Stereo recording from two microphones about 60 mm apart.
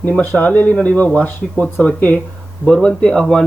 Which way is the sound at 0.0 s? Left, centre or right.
Left.